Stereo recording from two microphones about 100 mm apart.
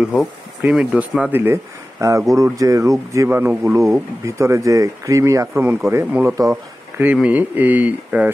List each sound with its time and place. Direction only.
0.0 s speech: 5° right (ahead or behind); by 3.3 s 30° right (ahead or behind)
3.3 s speech: 20° right (ahead or behind)
6.5 s speech: 15° right (ahead or behind)